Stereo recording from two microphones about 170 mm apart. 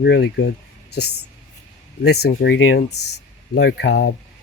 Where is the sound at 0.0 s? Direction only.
85° left.